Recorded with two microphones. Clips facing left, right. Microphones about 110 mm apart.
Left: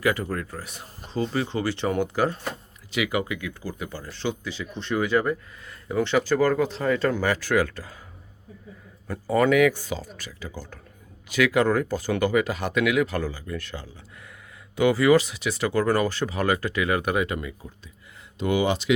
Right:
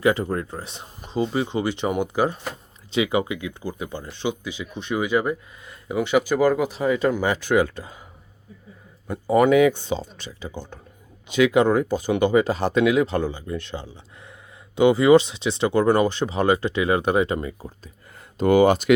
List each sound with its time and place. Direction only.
0.0 s speech: 25° right (ahead or behind)
9.0 s speech: 20° right (ahead or behind)
18.3 s speech: 45° right (ahead or behind)